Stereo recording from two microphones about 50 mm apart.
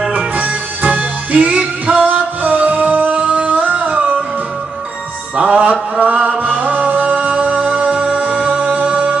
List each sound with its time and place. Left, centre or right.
0.1 s music: right
5.4 s music: right